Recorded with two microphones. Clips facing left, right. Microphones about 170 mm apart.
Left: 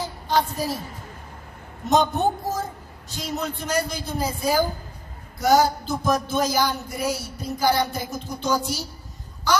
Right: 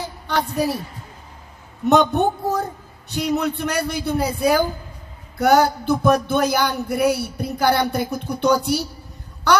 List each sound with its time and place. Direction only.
0.3 s speech: 65° right (ahead or behind)
1.9 s speech: 65° right (ahead or behind)
9.5 s a sound: 60° right (ahead or behind)